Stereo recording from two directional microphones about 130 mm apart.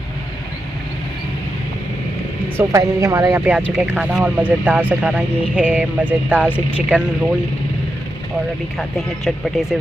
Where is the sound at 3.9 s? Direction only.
10° right (ahead or behind).